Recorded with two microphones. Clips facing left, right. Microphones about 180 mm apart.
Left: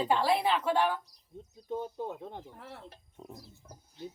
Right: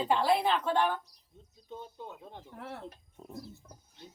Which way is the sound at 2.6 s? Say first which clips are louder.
Right 5 dB; 60° right (ahead or behind).